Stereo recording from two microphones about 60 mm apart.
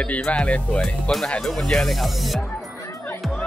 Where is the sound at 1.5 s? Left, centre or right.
Centre.